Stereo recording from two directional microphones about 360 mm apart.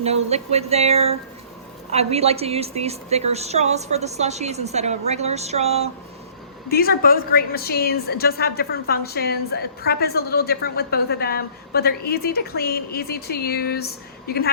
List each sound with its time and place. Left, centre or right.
0.0 s a woman's voice: centre
6.7 s a woman's voice: left